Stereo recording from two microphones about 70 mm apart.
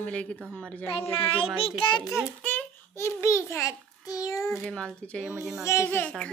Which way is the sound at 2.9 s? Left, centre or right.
Left.